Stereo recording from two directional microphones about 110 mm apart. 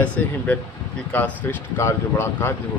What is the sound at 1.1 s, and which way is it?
Speech, 15° left (ahead or behind).